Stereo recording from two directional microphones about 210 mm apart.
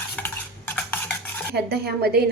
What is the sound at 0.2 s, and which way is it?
Stir, 5° left (ahead or behind).